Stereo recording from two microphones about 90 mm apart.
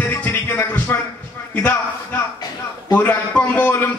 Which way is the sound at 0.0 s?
20° left (ahead or behind).